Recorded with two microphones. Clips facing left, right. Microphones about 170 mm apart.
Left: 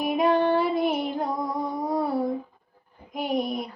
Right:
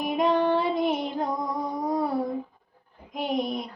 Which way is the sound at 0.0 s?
5° left (ahead or behind).